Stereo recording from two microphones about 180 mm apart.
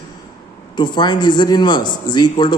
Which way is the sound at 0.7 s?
25° left (ahead or behind).